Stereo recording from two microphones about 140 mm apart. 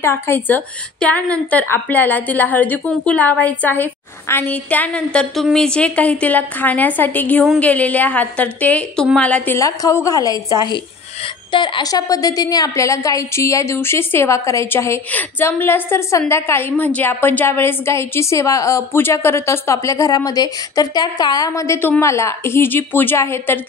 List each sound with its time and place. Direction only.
0.0 s a woman's voice: 15° left (ahead or behind)
9.6 s a woman's voice: 25° left (ahead or behind)